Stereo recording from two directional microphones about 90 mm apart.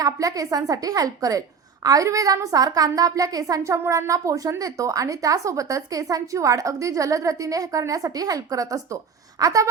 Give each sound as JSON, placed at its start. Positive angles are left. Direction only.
{"t": 0.0, "sound": "a woman's voice", "side_deg": -40}